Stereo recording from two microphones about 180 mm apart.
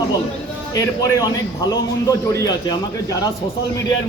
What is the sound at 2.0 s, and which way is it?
Speech, 20° left (ahead or behind).